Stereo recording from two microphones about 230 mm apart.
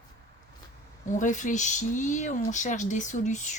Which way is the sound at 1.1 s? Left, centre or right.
Left.